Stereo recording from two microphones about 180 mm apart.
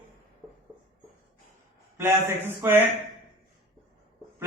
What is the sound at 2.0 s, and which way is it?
Speech, 15° right (ahead or behind).